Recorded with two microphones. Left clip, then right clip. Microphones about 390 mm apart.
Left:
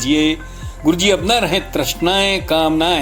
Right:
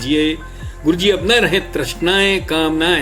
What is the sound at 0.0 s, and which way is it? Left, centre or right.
Speech, centre.